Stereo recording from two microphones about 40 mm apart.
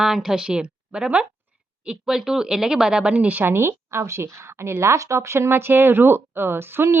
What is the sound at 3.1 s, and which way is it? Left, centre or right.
Speech, right.